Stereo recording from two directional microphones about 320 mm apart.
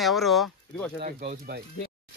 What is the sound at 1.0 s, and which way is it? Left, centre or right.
Speech, right.